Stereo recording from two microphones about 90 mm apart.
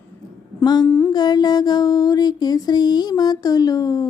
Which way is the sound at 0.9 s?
25° left (ahead or behind).